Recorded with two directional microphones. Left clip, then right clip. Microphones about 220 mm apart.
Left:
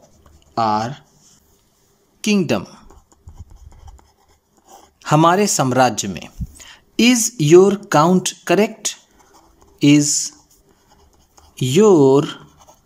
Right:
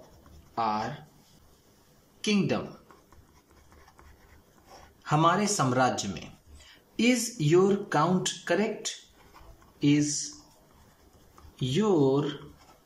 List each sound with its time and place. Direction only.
0.6 s speech: 50° left (ahead or behind)
2.2 s speech: 50° left (ahead or behind)
5.0 s speech: 45° left (ahead or behind)
11.5 s speech: 50° left (ahead or behind)